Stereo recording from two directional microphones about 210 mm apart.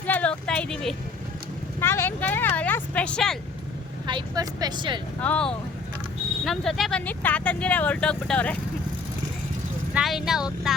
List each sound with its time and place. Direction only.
0.1 s a sound: 5° left (ahead or behind)
1.8 s speech: 10° left (ahead or behind)
4.0 s speech: 20° right (ahead or behind)
5.2 s speech: 5° left (ahead or behind)
9.9 s speech: centre (ahead or behind)